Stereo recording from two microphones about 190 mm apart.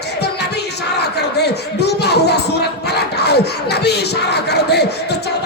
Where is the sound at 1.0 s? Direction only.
60° left (ahead or behind).